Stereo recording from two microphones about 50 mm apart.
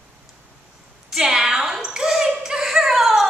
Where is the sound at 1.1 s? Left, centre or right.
Centre.